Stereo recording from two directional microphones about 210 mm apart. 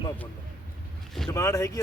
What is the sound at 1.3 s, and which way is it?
Speech, 15° left (ahead or behind).